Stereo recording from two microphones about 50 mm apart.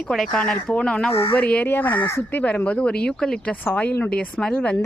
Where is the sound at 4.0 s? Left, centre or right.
Left.